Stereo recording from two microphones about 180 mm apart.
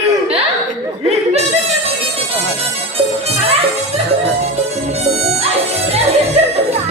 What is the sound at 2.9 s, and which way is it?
Music, 30° right (ahead or behind).